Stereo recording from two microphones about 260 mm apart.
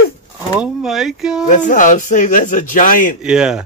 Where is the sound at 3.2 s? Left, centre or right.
Centre.